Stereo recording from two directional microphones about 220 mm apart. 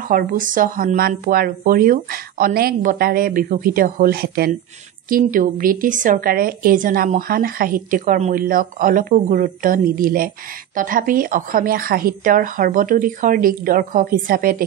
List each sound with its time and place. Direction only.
0.1 s a woman's voice: 40° right (ahead or behind)